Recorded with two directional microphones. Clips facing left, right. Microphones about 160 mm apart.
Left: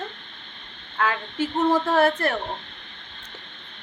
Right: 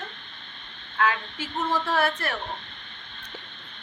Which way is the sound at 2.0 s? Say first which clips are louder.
Left 6 dB; 50° left (ahead or behind).